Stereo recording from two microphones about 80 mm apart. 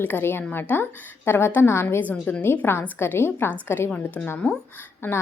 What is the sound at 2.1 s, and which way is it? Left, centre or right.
A woman's voice, centre.